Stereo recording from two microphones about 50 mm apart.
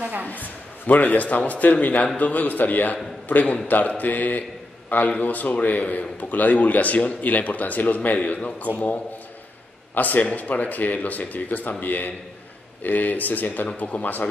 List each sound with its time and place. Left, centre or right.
0.0 s a sound: right
0.3 s a man's voice: left
9.9 s a man's voice: left